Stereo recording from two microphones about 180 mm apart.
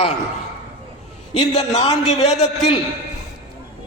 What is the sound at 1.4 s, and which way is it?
Speech, 35° left (ahead or behind).